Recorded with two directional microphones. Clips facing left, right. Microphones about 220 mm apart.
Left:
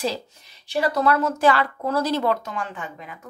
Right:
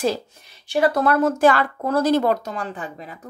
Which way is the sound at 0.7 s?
50° right (ahead or behind).